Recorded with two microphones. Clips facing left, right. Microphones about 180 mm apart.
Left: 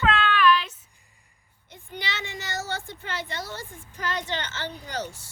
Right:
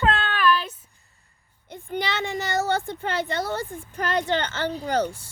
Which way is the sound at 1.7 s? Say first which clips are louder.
Right 8 dB; 55° right (ahead or behind).